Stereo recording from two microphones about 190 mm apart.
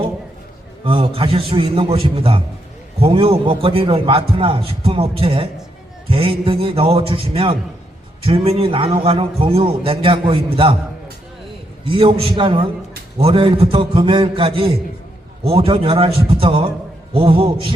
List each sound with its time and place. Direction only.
0.9 s a man's voice: 25° right (ahead or behind)
11.9 s a man's voice: 25° right (ahead or behind)